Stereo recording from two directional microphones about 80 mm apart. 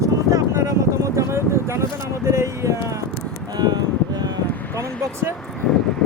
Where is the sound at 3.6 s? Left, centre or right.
Right.